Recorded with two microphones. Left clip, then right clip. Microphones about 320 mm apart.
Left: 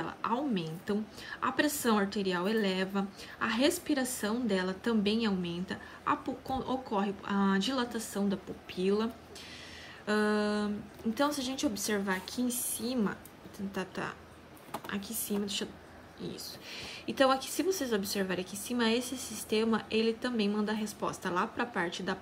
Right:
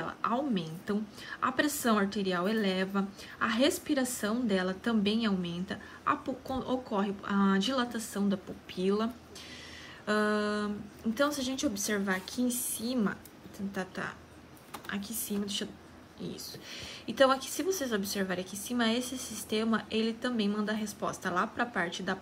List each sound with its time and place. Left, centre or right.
0.0 s a woman's voice: centre